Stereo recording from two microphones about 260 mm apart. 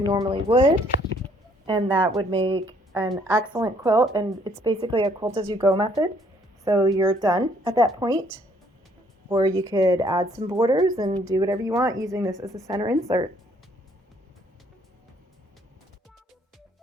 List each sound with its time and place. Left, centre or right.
0.1 s a woman's voice: centre
9.6 s a woman's voice: centre